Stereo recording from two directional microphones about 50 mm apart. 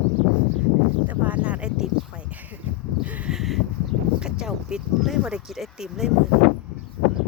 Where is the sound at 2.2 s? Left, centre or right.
Right.